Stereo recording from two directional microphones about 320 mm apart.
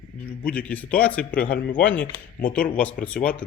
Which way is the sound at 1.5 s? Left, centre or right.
Left.